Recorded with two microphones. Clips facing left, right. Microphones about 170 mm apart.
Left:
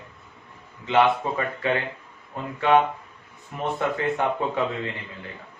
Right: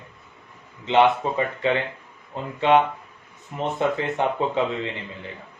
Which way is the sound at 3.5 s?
20° right (ahead or behind).